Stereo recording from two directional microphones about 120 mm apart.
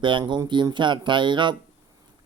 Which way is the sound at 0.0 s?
40° right (ahead or behind).